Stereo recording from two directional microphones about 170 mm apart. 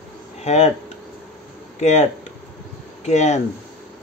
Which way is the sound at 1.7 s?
45° left (ahead or behind).